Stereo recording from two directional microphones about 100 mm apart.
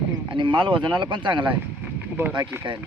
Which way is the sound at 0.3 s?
55° right (ahead or behind).